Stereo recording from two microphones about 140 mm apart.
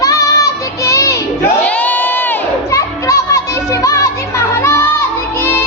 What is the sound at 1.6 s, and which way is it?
Crowd, 10° left (ahead or behind).